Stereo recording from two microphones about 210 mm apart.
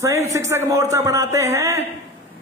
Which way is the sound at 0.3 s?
15° right (ahead or behind).